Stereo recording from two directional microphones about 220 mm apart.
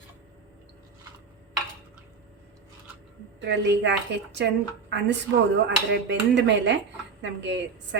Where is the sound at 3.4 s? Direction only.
50° right (ahead or behind).